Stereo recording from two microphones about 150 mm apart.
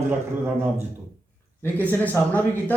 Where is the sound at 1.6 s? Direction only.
10° left (ahead or behind).